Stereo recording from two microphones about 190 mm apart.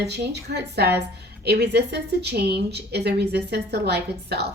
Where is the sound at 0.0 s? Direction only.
60° right (ahead or behind).